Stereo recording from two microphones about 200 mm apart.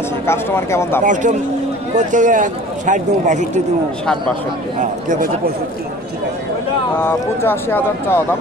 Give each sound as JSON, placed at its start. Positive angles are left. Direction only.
{"t": 0.3, "sound": "speech", "side_deg": 10}
{"t": 1.0, "sound": "a man's voice", "side_deg": -40}
{"t": 4.7, "sound": "a man's voice", "side_deg": -40}
{"t": 7.0, "sound": "speech", "side_deg": 10}